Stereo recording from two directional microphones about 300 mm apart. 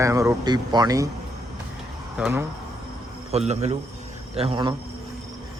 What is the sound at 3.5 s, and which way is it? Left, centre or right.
Speech, right.